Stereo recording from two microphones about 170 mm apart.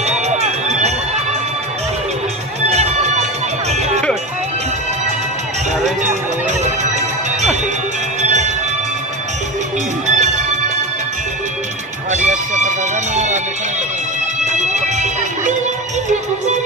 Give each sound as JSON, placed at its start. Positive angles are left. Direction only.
{"t": 0.0, "sound": "run", "side_deg": -40}
{"t": 2.7, "sound": "music", "side_deg": -40}
{"t": 8.2, "sound": "music", "side_deg": -45}
{"t": 10.0, "sound": "music", "side_deg": -45}
{"t": 12.1, "sound": "music", "side_deg": -45}
{"t": 14.4, "sound": "music", "side_deg": -45}